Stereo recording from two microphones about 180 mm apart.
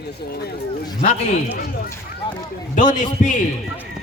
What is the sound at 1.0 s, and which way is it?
Speech, 40° left (ahead or behind).